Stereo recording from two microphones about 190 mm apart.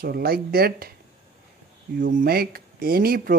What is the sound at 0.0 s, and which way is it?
Speech, 55° right (ahead or behind).